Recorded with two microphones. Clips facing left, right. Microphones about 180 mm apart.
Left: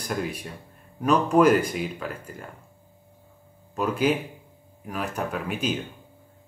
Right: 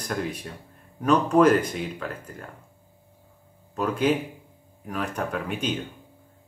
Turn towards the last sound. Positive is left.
turn(degrees=5)  # may be behind; listen again after turning